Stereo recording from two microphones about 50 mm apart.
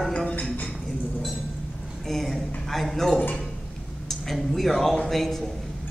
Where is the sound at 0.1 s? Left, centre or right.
Centre.